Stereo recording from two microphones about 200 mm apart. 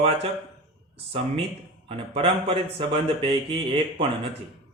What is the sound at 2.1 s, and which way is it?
Speech, 25° right (ahead or behind).